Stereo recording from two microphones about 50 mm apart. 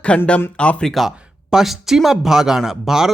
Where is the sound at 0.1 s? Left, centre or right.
Centre.